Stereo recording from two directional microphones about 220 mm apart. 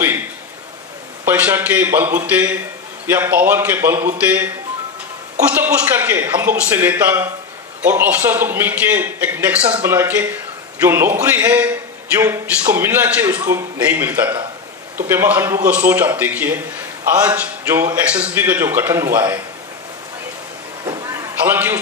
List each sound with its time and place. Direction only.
1.2 s a man's voice: 10° right (ahead or behind)
5.5 s a man's voice: 5° right (ahead or behind)
20.8 s a sound: 15° right (ahead or behind)